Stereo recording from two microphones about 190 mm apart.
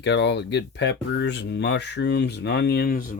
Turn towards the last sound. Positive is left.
turn(degrees=45)  # may be behind; listen again after turning